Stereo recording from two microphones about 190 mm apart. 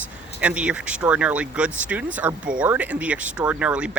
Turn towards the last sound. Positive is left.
turn(degrees=-5)  # may be behind; listen again after turning